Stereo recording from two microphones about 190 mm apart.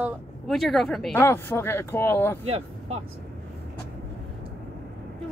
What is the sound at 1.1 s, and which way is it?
Speech, 10° left (ahead or behind).